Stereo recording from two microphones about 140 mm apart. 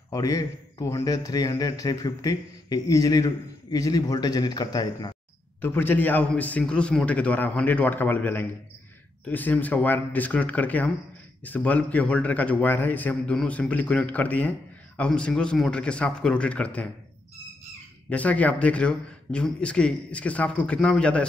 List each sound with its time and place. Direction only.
0.1 s a man's voice: 25° left (ahead or behind)
5.6 s speech: 15° left (ahead or behind)
18.1 s speech: 10° left (ahead or behind)